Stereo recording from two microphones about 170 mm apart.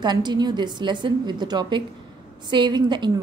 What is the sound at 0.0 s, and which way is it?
A woman's voice, 25° right (ahead or behind).